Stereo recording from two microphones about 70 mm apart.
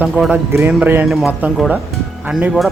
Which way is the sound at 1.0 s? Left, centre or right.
Centre.